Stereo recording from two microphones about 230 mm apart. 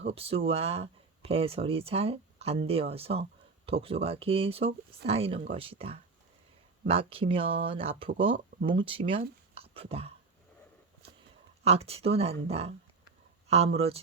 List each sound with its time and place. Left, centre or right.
0.0 s speech: right
9.6 s whispering: right
11.6 s speech: right